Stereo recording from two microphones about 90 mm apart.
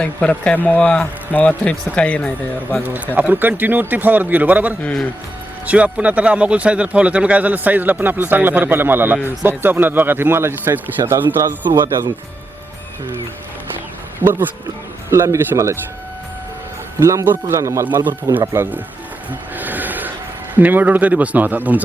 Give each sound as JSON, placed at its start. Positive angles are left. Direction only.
{"t": 0.0, "sound": "speech", "side_deg": 10}
{"t": 3.2, "sound": "a man's voice", "side_deg": -20}
{"t": 11.7, "sound": "speech", "side_deg": -55}
{"t": 14.2, "sound": "speech", "side_deg": -25}
{"t": 17.0, "sound": "speech", "side_deg": -35}
{"t": 17.8, "sound": "a man's voice", "side_deg": -20}
{"t": 19.3, "sound": "a sound", "side_deg": -20}
{"t": 20.6, "sound": "a man's voice", "side_deg": -20}